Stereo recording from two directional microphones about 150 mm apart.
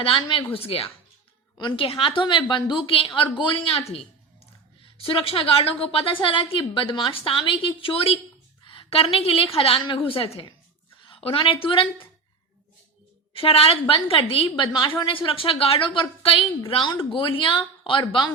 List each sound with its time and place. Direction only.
0.0 s a woman's voice: 35° left (ahead or behind)
11.0 s a sound: 40° left (ahead or behind)
11.6 s a woman's voice: 35° left (ahead or behind)
13.3 s a woman's voice: 40° left (ahead or behind)